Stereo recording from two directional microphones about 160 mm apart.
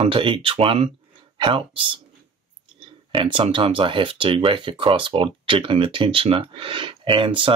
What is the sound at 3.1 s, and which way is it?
Speech, 30° right (ahead or behind).